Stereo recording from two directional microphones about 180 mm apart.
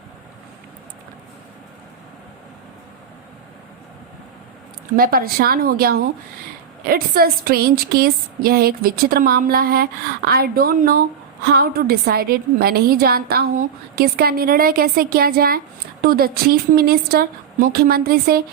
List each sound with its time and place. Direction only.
4.9 s a woman's voice: 55° right (ahead or behind)